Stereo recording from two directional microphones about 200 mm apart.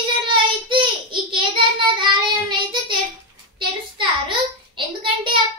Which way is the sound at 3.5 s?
25° right (ahead or behind).